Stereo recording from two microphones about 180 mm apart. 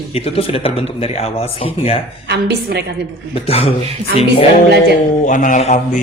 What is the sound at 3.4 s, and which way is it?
Speech, 35° left (ahead or behind).